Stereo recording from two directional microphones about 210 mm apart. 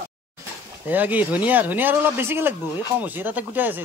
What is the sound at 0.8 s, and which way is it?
A man's voice, 10° right (ahead or behind).